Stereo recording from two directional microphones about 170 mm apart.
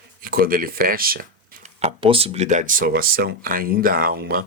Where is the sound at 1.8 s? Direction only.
35° right (ahead or behind).